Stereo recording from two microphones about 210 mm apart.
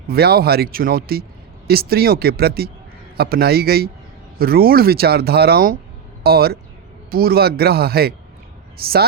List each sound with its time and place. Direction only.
0.1 s speech: 50° right (ahead or behind)